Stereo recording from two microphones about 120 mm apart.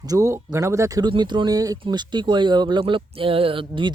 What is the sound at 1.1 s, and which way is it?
Speech, 40° right (ahead or behind).